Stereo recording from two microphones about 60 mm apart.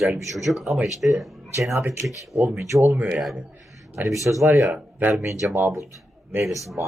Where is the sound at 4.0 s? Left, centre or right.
Right.